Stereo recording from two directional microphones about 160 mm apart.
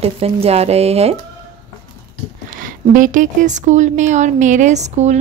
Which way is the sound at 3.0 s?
50° right (ahead or behind).